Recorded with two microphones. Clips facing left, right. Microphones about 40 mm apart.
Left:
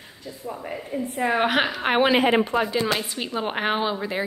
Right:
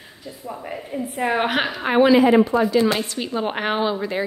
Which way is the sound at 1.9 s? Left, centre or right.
Left.